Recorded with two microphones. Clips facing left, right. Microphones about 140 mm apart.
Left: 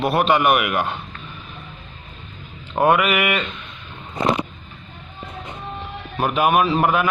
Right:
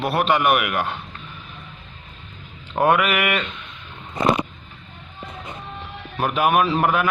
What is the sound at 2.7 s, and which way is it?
Speech, 10° left (ahead or behind).